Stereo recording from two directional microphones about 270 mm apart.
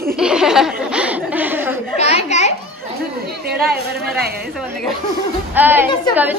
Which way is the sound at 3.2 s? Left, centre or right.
Right.